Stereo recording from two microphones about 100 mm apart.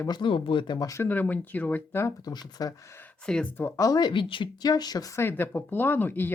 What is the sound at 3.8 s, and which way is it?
Speech, 40° left (ahead or behind).